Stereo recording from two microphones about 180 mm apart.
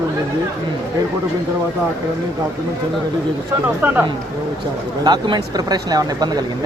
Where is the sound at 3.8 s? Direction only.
10° right (ahead or behind).